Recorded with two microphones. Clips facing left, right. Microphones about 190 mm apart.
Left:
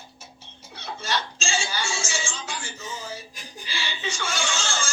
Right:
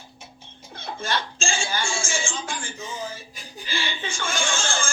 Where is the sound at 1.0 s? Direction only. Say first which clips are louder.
Right 2 dB; 50° right (ahead or behind).